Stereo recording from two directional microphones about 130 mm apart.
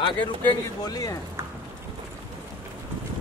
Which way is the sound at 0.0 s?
40° left (ahead or behind).